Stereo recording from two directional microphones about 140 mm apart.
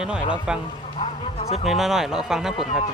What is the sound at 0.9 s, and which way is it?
Speech, 45° left (ahead or behind).